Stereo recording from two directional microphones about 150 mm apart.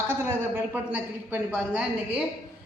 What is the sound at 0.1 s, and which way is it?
A woman's voice, 15° right (ahead or behind).